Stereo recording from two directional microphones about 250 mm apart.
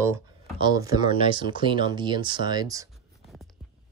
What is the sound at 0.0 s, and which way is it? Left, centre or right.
Speech, centre.